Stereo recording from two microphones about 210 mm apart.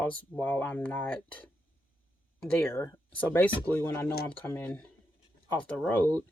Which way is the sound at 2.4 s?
10° left (ahead or behind).